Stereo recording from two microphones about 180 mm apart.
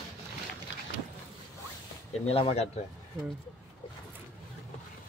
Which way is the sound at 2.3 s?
35° left (ahead or behind).